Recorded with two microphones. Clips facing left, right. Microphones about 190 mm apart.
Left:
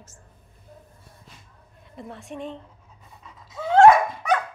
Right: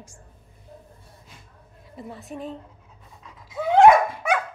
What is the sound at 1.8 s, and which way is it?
Speech, centre (ahead or behind).